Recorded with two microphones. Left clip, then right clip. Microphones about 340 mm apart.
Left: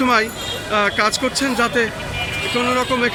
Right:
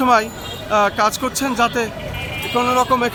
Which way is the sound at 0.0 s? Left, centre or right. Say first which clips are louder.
Right 1 dB; centre.